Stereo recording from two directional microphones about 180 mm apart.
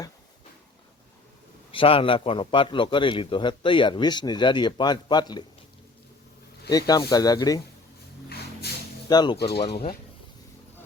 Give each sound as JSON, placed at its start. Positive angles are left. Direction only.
{"t": 1.7, "sound": "a man's voice", "side_deg": 30}
{"t": 6.7, "sound": "a man's voice", "side_deg": 20}
{"t": 9.0, "sound": "a man's voice", "side_deg": 25}